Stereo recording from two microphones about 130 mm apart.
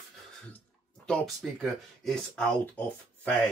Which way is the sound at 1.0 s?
5° left (ahead or behind).